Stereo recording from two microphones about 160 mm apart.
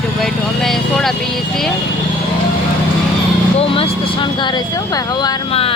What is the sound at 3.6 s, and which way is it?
Speech, 35° left (ahead or behind).